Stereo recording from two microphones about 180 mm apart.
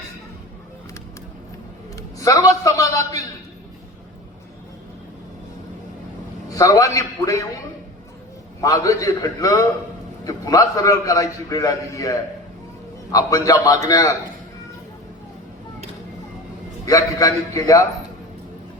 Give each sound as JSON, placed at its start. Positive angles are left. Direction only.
{"t": 2.0, "sound": "a man's voice", "side_deg": 20}
{"t": 6.5, "sound": "a man's voice", "side_deg": 20}
{"t": 8.6, "sound": "a man's voice", "side_deg": 20}
{"t": 16.8, "sound": "a man's voice", "side_deg": 20}